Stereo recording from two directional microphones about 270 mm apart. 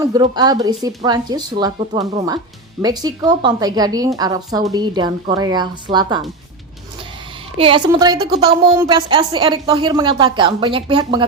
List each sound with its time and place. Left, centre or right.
0.0 s a woman's voice: centre
7.6 s a woman's voice: centre